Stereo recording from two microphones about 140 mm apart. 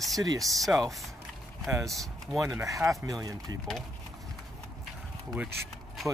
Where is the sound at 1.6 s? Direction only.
20° right (ahead or behind).